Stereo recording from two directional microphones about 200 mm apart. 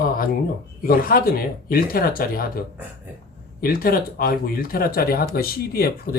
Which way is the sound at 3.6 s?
45° left (ahead or behind).